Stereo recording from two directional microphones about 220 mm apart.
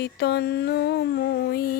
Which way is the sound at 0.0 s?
50° left (ahead or behind).